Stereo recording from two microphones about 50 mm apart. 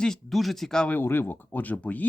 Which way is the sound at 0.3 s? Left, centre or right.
Centre.